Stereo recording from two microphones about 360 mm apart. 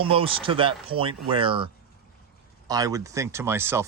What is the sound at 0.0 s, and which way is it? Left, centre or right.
Speech, centre.